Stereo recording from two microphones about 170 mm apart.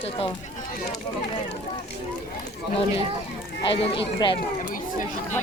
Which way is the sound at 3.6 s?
30° left (ahead or behind).